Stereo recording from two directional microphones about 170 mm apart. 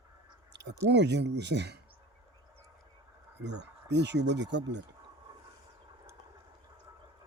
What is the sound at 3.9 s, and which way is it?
Speech, 90° right.